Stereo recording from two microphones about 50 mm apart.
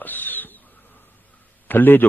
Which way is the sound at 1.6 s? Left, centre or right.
Left.